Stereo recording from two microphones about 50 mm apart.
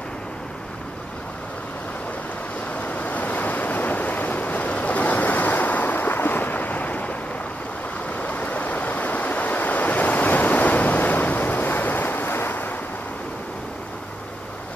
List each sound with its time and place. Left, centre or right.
2.7 s waves: left